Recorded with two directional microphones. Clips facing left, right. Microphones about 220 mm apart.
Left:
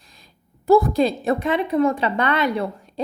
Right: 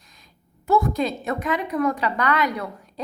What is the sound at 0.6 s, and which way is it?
A woman's voice, 35° left (ahead or behind).